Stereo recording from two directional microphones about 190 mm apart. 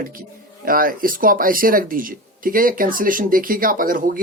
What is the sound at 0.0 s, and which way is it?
Speech, 50° right (ahead or behind).